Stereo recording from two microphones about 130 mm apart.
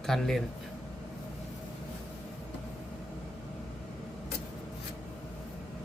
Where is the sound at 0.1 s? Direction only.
Centre (ahead or behind).